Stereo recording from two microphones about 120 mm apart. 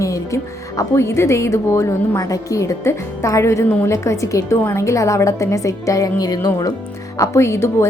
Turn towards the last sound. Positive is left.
turn(degrees=20)  # may be behind; listen again after turning